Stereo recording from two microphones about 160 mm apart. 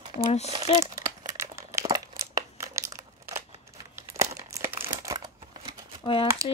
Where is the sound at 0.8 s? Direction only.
20° right (ahead or behind).